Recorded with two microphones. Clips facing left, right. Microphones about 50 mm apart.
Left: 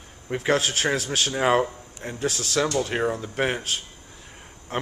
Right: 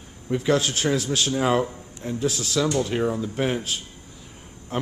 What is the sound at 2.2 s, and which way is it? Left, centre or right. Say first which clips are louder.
Speech: even; left.